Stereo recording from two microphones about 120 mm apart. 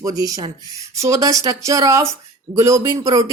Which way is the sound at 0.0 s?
30° right (ahead or behind).